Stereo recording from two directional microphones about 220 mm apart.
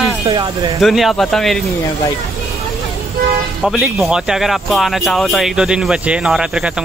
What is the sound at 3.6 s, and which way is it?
Speech, centre (ahead or behind).